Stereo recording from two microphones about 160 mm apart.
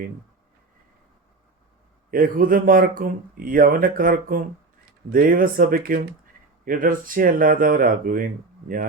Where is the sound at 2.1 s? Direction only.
60° right (ahead or behind).